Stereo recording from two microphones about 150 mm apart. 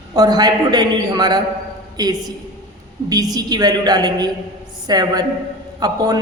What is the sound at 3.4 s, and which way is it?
A man's voice, 25° right (ahead or behind).